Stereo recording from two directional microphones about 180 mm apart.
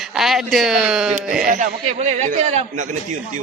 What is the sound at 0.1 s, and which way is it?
Speech, centre (ahead or behind).